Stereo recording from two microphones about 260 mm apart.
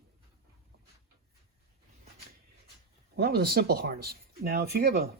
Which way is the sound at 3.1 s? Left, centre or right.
Right.